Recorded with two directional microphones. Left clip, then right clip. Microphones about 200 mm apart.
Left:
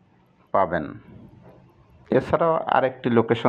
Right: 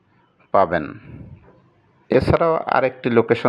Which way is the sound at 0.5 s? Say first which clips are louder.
Right 5 dB; 40° right (ahead or behind).